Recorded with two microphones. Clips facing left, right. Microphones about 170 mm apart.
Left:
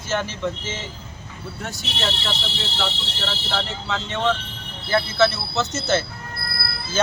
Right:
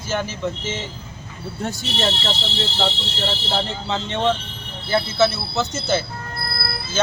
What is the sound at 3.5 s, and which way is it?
Speech, 25° right (ahead or behind).